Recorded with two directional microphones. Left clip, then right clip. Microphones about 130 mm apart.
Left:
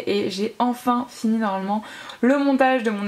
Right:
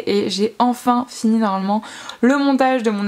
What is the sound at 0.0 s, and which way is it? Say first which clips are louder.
Speech: right 5 dB; 30° right (ahead or behind).